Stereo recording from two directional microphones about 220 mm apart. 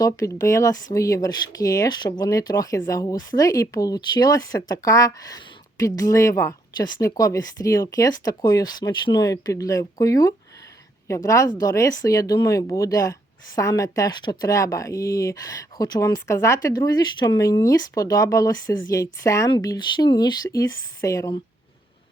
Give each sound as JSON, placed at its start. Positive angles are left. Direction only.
{"t": 0.0, "sound": "speech", "side_deg": 15}